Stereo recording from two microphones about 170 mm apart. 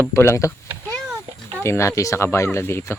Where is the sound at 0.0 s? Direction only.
15° left (ahead or behind).